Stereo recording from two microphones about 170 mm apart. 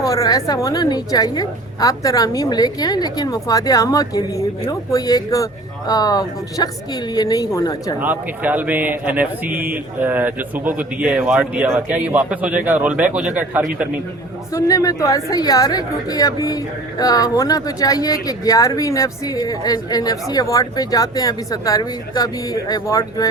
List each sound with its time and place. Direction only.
0.0 s speech: 20° left (ahead or behind)
7.9 s a man's voice: 10° right (ahead or behind)
14.5 s speech: 20° left (ahead or behind)